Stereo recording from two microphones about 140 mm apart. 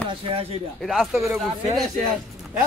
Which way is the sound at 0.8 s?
Centre (ahead or behind).